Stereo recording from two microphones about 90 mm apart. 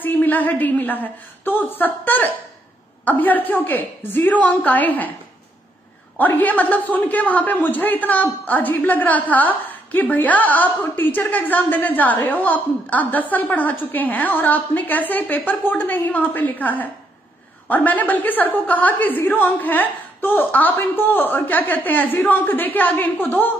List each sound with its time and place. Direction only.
0.0 s a man's voice: 20° left (ahead or behind)
6.1 s a man's voice: 20° left (ahead or behind)